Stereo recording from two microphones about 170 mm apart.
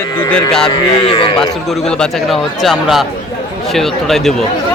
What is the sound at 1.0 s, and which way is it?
Speech, 30° left (ahead or behind).